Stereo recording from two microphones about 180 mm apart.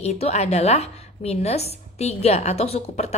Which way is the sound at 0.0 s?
35° left (ahead or behind).